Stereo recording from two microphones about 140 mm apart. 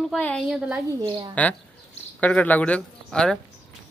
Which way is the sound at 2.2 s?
10° left (ahead or behind).